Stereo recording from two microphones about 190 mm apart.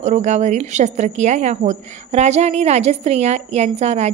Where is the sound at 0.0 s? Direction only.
40° right (ahead or behind).